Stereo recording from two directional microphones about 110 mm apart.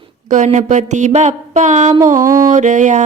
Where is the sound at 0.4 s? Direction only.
90° right.